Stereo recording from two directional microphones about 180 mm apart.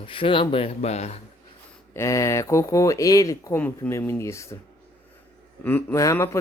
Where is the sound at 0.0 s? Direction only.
30° left (ahead or behind).